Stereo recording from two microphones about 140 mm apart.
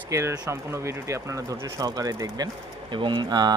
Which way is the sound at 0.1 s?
20° right (ahead or behind).